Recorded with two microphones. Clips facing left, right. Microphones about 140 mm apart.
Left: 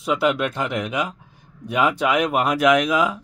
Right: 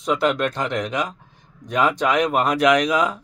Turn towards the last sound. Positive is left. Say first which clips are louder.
# even
turn(degrees=0)  # may be behind; listen again after turning